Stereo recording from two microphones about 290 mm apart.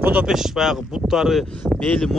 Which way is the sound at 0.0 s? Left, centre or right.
Centre.